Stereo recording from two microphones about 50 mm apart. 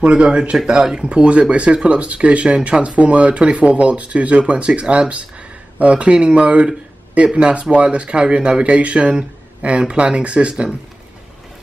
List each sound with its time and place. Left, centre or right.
0.0 s speech: right